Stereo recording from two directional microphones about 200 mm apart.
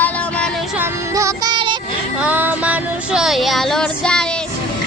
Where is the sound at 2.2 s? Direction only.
10° right (ahead or behind).